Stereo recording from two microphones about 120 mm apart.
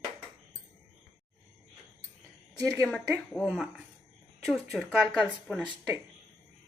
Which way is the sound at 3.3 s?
5° left (ahead or behind).